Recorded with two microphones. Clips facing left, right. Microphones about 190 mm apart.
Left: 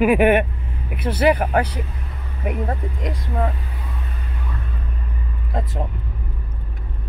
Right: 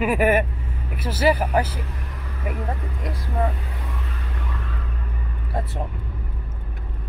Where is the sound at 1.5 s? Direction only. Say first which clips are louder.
Left 2 dB; 65° left (ahead or behind).